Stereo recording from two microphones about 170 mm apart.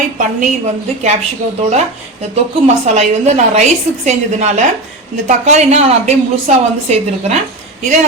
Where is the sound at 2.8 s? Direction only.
40° right (ahead or behind).